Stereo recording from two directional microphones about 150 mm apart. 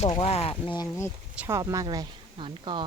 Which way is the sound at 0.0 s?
40° left (ahead or behind).